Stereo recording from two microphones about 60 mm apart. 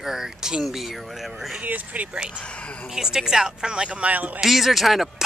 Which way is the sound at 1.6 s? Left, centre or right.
Right.